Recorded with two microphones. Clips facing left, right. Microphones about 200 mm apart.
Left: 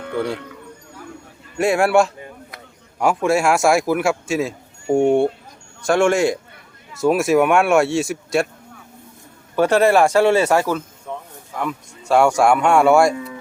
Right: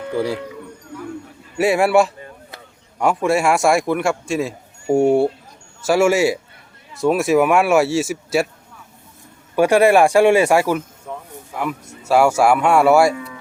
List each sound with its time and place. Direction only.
1.5 s speech: centre (ahead or behind)
9.6 s a man's voice: 10° right (ahead or behind)
11.1 s a sound: 5° right (ahead or behind)
11.5 s speech: 5° right (ahead or behind)
13.1 s cattle: 30° left (ahead or behind)